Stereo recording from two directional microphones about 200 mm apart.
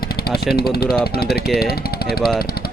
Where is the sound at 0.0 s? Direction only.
50° left (ahead or behind).